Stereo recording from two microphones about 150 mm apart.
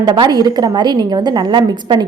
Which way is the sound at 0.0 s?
30° right (ahead or behind).